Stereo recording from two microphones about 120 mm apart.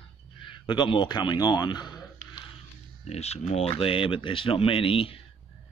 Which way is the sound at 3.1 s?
65° left (ahead or behind).